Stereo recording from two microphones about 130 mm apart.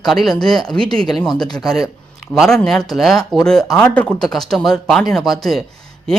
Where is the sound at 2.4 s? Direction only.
5° left (ahead or behind).